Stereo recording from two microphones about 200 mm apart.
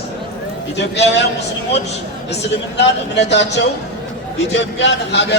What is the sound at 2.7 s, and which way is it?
A man's voice, 60° left (ahead or behind).